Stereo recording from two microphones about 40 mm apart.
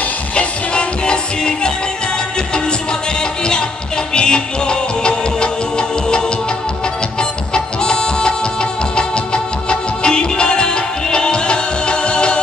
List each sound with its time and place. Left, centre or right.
0.4 s music: left
4.1 s music: left